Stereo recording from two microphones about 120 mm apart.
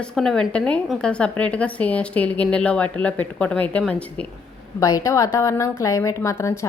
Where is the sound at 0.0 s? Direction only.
5° left (ahead or behind).